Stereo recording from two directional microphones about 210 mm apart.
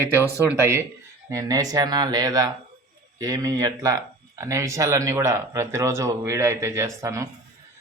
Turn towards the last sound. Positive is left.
turn(degrees=-15)  # may be behind; listen again after turning